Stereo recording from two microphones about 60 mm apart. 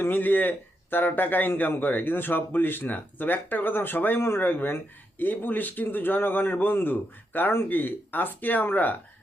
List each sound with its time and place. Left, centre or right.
0.0 s speech: left